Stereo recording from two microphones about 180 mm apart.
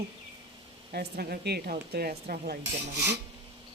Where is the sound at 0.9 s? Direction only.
65° right (ahead or behind).